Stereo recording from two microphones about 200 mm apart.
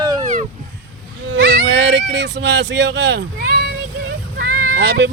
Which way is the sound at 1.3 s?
55° right (ahead or behind).